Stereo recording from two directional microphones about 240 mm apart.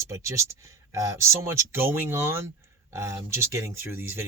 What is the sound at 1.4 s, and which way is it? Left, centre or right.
Speech, centre.